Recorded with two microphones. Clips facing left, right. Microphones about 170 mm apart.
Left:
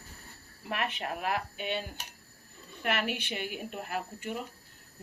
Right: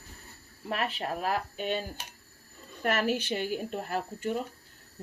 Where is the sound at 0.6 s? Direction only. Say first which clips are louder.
Right 2 dB; 35° right (ahead or behind).